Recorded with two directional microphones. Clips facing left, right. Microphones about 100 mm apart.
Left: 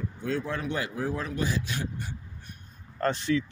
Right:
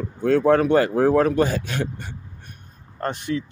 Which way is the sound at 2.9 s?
25° right (ahead or behind).